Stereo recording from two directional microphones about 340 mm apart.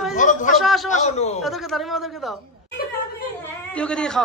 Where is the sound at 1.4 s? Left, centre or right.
Centre.